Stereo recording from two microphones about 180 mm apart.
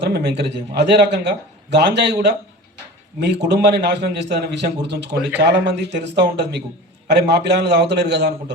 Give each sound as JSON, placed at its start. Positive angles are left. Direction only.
{"t": 0.0, "sound": "a man's voice", "side_deg": -65}
{"t": 3.2, "sound": "a man's voice", "side_deg": -70}